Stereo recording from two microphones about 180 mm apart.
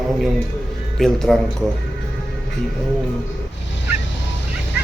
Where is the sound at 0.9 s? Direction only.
5° left (ahead or behind).